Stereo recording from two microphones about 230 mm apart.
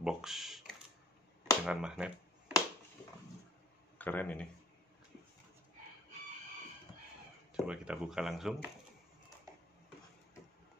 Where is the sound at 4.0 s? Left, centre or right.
Centre.